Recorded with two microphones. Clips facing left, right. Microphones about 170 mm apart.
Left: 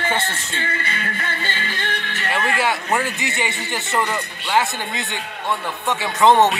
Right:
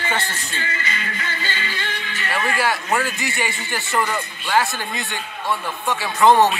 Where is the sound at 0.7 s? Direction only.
60° left (ahead or behind).